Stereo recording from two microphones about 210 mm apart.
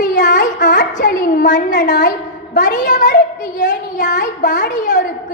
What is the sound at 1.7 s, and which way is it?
Speech, 55° left (ahead or behind).